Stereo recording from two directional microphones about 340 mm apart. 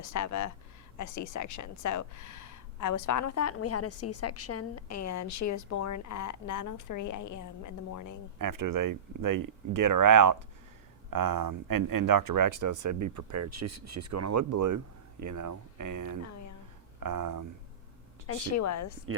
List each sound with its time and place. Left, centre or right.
0.0 s a woman's voice: left
8.4 s speech: right
18.3 s a woman's voice: left
19.1 s speech: right